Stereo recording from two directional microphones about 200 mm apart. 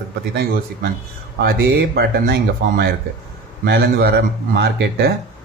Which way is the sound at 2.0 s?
50° right (ahead or behind).